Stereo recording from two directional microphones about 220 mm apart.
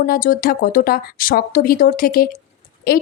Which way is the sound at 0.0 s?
40° left (ahead or behind).